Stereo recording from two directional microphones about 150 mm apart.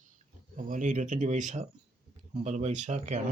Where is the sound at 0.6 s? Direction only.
60° right (ahead or behind).